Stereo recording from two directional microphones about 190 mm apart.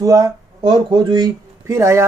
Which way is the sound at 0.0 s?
15° right (ahead or behind).